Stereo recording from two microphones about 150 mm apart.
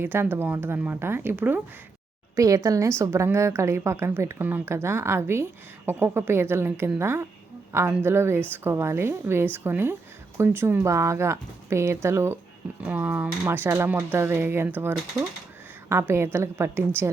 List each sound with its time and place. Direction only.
0.0 s a woman's voice: 15° right (ahead or behind)